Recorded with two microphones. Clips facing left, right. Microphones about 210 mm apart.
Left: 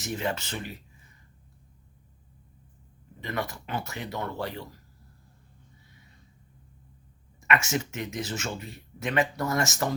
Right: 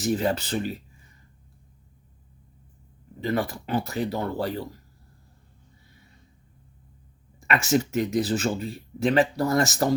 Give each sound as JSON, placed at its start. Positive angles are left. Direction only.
{"t": 0.0, "sound": "speech", "side_deg": -35}
{"t": 3.2, "sound": "speech", "side_deg": -30}
{"t": 7.4, "sound": "speech", "side_deg": -35}